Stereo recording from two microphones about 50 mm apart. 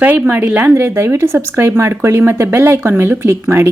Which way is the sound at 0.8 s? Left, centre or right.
Right.